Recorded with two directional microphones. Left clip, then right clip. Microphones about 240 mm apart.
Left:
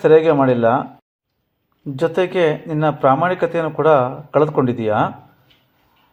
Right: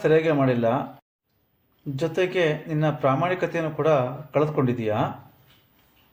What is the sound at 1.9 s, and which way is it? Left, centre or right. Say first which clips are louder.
Speech: left 6 dB; centre.